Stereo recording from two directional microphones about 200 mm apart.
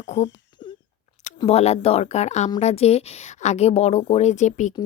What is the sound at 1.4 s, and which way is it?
Speech, 30° left (ahead or behind).